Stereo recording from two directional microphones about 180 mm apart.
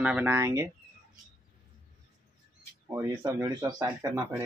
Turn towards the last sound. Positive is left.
turn(degrees=-15)  # may be behind; listen again after turning